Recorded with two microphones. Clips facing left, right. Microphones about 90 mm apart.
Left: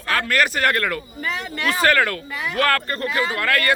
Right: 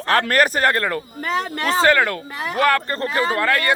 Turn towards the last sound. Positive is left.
turn(degrees=-20)  # may be behind; listen again after turning